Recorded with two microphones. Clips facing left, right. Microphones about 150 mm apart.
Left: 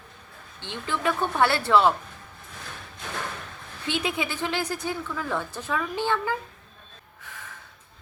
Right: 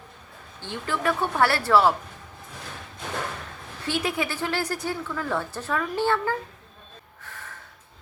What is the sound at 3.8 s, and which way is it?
A woman's voice, 20° left (ahead or behind).